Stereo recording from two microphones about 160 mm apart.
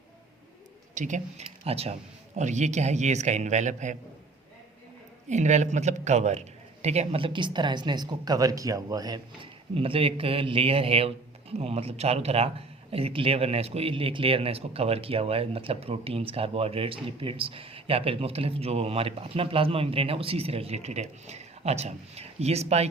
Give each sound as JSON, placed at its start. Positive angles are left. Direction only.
{"t": 0.9, "sound": "a man's voice", "side_deg": -50}
{"t": 5.3, "sound": "speech", "side_deg": -50}
{"t": 9.7, "sound": "speech", "side_deg": -35}